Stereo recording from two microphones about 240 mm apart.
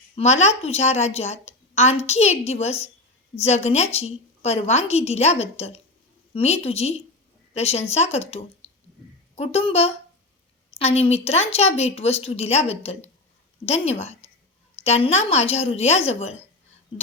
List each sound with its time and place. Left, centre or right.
0.2 s a woman's voice: left